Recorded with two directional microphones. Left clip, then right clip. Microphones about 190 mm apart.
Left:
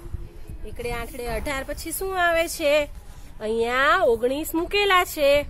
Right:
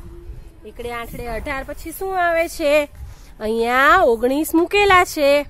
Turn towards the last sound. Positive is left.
turn(degrees=-50)  # may be behind; listen again after turning